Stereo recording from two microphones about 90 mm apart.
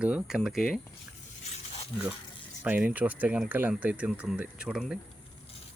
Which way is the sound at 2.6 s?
15° right (ahead or behind).